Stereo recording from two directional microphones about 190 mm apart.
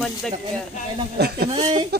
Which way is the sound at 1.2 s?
55° right (ahead or behind).